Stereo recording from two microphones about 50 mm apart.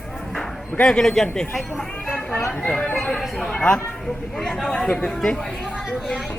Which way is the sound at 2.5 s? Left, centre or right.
Left.